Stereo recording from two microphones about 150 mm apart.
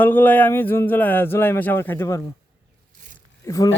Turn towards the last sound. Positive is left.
turn(degrees=20)  # may be behind; listen again after turning